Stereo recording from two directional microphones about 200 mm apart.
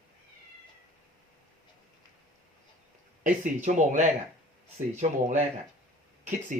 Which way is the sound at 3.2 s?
40° right (ahead or behind).